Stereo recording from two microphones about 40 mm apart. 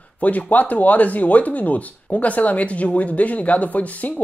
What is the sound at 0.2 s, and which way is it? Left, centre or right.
Speech, left.